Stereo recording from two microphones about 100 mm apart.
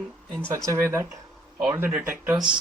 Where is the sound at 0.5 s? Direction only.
30° right (ahead or behind).